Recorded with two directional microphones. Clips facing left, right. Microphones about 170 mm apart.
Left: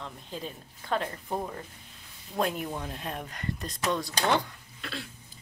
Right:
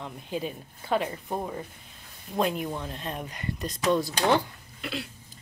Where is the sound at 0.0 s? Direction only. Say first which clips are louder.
Right 6 dB; 10° right (ahead or behind).